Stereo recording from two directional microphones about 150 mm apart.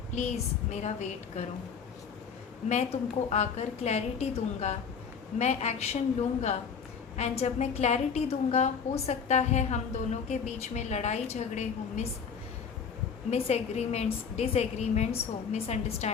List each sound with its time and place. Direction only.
0.1 s a woman's voice: 50° left (ahead or behind)
2.6 s a woman's voice: 45° left (ahead or behind)
7.2 s a woman's voice: 45° left (ahead or behind)
13.3 s a woman's voice: 45° left (ahead or behind)